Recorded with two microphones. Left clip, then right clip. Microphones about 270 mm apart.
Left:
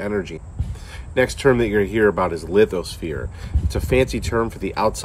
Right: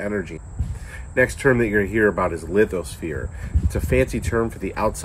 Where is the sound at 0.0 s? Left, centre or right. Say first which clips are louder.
Left 2 dB; centre.